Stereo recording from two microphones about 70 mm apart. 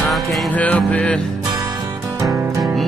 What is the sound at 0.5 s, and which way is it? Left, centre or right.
Music, left.